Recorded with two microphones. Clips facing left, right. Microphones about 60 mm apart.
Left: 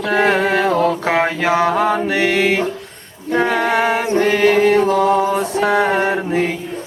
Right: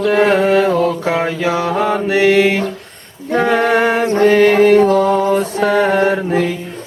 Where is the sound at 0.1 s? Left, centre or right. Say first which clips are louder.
Right 2 dB; left.